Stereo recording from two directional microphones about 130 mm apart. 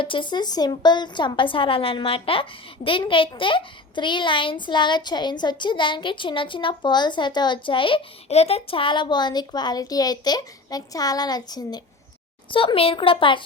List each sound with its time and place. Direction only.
0.0 s a child's voice: 40° left (ahead or behind)
12.5 s speech: 45° left (ahead or behind)